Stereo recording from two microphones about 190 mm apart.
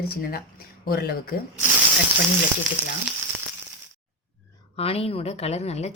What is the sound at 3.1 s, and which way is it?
Frying, centre (ahead or behind).